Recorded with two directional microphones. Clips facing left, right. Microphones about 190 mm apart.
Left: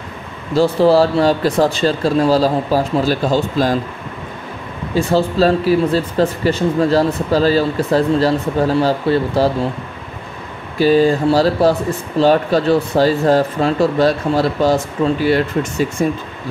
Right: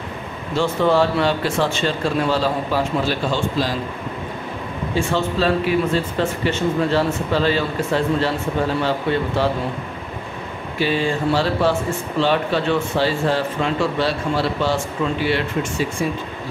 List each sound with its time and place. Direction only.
0.6 s speech: 35° left (ahead or behind)
4.9 s speech: 40° left (ahead or behind)
10.8 s speech: 40° left (ahead or behind)
16.0 s speech: 45° left (ahead or behind)